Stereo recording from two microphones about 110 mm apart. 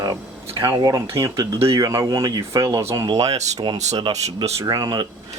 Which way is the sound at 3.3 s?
90° right.